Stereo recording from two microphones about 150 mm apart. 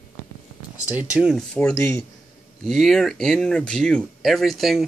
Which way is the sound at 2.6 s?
Centre (ahead or behind).